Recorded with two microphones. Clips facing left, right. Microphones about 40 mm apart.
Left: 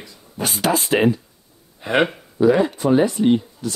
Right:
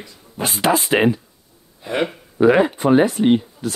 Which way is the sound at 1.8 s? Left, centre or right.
Left.